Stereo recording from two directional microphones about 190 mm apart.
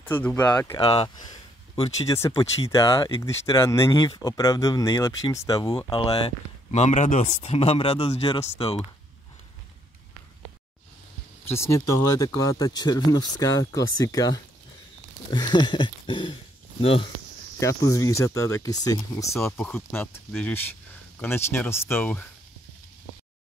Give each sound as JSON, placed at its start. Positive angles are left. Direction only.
{"t": 0.0, "sound": "speech", "side_deg": 10}
{"t": 0.7, "sound": "speech", "side_deg": 30}
{"t": 2.0, "sound": "speech", "side_deg": 15}
{"t": 11.4, "sound": "speech", "side_deg": 15}
{"t": 17.6, "sound": "speech", "side_deg": 15}
{"t": 18.2, "sound": "speech", "side_deg": 90}
{"t": 18.6, "sound": "speech", "side_deg": 20}